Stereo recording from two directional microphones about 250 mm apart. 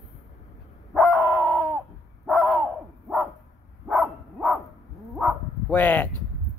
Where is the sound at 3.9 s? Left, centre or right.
Centre.